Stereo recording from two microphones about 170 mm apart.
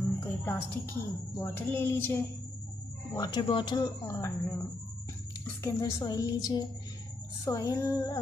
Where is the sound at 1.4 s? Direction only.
15° left (ahead or behind).